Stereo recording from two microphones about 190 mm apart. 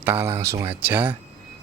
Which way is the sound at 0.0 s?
10° right (ahead or behind).